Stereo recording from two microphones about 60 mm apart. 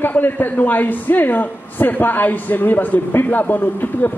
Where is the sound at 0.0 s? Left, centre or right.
Left.